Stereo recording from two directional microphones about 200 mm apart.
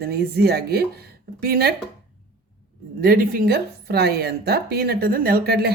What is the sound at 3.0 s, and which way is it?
Speech, 50° right (ahead or behind).